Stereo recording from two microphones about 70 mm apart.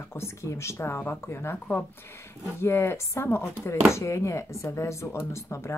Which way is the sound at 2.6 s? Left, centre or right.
Left.